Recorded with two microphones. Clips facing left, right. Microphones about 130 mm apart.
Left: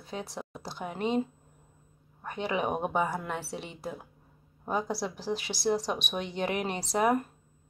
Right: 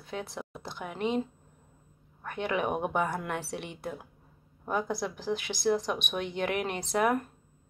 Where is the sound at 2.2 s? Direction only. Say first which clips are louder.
Even; 25° left (ahead or behind).